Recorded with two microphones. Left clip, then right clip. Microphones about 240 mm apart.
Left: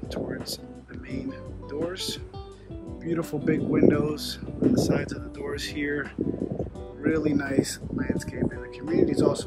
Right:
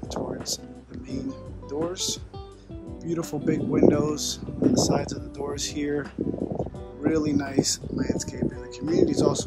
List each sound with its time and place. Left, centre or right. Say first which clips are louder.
0.1 s a sound: right 2 dB; centre
1.1 s music: right 1 dB; centre
1.8 s speech: right 2 dB; centre
6.3 s music: right 1 dB; centre
7.0 s speech: right 1 dB; centre